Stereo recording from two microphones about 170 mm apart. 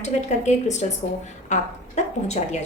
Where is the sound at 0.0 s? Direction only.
40° left (ahead or behind).